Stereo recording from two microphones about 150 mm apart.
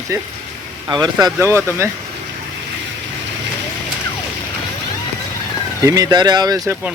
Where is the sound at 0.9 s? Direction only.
25° right (ahead or behind).